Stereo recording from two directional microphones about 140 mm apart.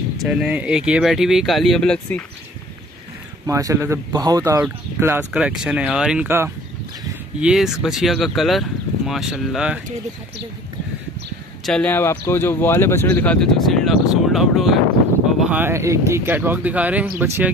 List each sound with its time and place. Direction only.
0.2 s speech: 5° right (ahead or behind)
3.4 s speech: 20° right (ahead or behind)
4.6 s speech: 10° right (ahead or behind)
7.3 s speech: 5° right (ahead or behind)
11.6 s speech: 10° left (ahead or behind)
15.4 s speech: 15° right (ahead or behind)